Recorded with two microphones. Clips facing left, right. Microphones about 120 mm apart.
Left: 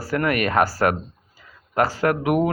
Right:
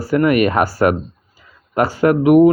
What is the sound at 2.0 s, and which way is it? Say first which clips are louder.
Speech: right 13 dB; 10° right (ahead or behind).